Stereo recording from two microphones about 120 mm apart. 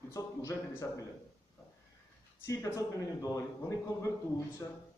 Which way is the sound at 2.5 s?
25° left (ahead or behind).